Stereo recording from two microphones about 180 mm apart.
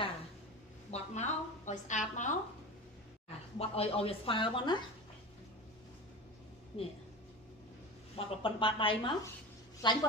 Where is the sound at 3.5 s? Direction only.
35° left (ahead or behind).